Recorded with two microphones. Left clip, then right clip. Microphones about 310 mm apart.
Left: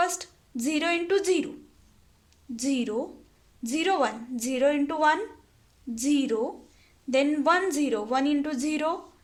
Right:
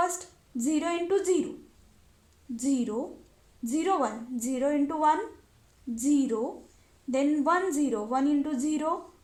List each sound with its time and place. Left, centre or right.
0.0 s a woman's voice: left
2.6 s a woman's voice: left